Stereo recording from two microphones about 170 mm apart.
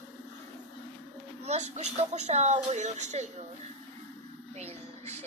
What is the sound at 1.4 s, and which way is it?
Speech, 40° right (ahead or behind).